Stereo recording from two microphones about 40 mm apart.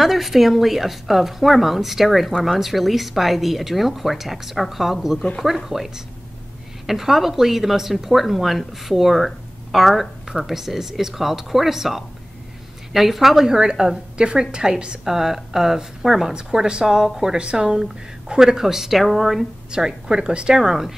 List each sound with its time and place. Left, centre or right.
0.0 s a woman's voice: centre
19.7 s a woman's voice: centre